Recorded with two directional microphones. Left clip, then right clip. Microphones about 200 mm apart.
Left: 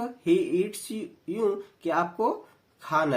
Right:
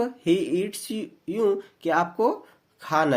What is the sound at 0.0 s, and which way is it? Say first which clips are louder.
Speech: right 2 dB; 45° right (ahead or behind).